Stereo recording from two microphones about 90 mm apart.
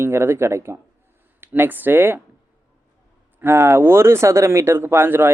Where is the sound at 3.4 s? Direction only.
30° right (ahead or behind).